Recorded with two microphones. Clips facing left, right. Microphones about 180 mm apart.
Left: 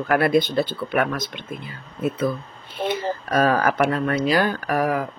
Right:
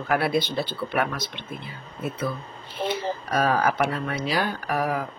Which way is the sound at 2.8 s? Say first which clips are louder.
Left 3 dB; 50° left (ahead or behind).